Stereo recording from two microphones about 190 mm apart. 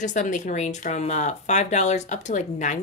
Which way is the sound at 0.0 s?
40° left (ahead or behind).